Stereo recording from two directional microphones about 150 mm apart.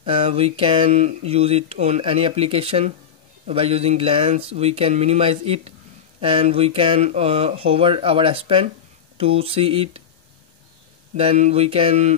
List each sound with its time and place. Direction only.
0.0 s speech: 40° right (ahead or behind)
11.1 s speech: 45° right (ahead or behind)